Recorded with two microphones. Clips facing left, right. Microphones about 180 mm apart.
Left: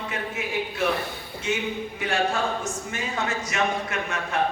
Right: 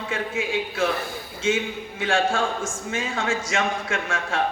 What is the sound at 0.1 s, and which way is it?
A man's voice, 90° right.